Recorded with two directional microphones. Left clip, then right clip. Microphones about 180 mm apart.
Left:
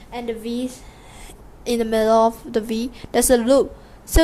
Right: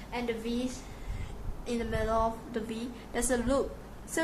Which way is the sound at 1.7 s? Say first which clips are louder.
Left 14 dB; 50° left (ahead or behind).